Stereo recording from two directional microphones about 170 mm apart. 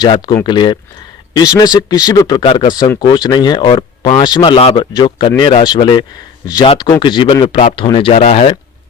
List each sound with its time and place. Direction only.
0.0 s speech: 25° left (ahead or behind)